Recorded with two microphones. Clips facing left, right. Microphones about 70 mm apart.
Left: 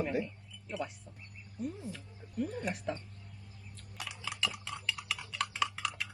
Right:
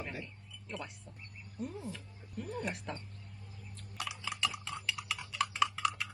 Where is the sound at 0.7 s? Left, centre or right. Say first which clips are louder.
Left 5 dB; centre.